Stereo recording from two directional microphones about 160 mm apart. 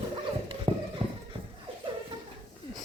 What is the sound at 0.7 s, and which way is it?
Clip-clop, 35° right (ahead or behind).